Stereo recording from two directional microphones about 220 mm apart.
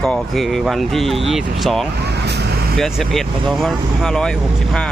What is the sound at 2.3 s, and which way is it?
Vehicle, 50° right (ahead or behind).